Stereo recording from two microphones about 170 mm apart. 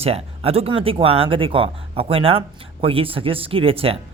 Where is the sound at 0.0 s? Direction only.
35° right (ahead or behind).